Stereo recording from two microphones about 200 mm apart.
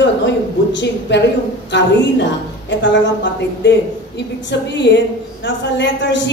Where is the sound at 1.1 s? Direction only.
60° left (ahead or behind).